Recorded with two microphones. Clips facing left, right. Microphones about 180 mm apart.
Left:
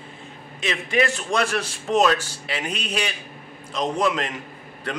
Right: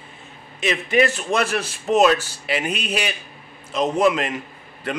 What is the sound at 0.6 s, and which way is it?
A man's voice, 5° right (ahead or behind).